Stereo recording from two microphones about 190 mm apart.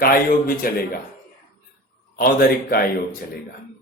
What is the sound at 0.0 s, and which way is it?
Mantra, 50° left (ahead or behind).